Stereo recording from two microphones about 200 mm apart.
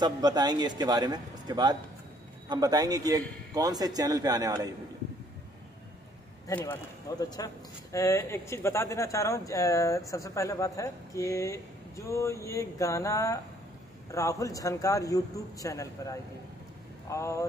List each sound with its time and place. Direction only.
0.0 s a man's voice: 20° right (ahead or behind)
6.4 s speech: 15° left (ahead or behind)